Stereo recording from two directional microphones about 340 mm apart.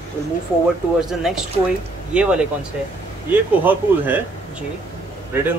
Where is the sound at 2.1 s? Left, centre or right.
Centre.